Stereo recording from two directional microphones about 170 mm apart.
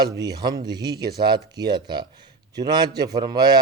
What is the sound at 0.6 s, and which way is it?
A man's voice, 25° right (ahead or behind).